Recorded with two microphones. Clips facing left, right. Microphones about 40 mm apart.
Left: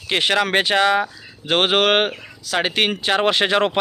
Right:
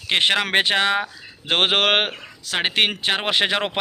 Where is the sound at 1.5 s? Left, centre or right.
Right.